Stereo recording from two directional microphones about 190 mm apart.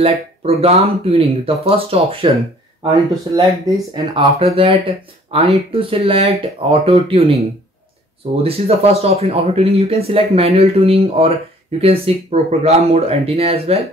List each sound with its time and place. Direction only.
0.0 s speech: 30° right (ahead or behind)
3.3 s speech: 25° right (ahead or behind)
8.4 s speech: 30° right (ahead or behind)